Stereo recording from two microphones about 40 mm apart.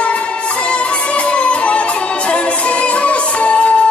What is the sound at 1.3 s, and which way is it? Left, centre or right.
Music, left.